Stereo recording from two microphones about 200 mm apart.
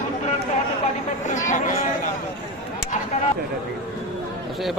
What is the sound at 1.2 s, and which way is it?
Speech, 40° left (ahead or behind).